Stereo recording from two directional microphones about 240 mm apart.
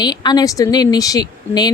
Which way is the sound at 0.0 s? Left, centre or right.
Centre.